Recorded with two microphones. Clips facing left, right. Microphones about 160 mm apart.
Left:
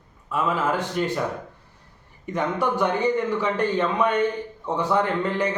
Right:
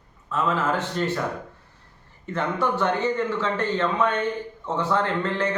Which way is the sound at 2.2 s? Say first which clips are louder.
Left 1 dB; 15° left (ahead or behind).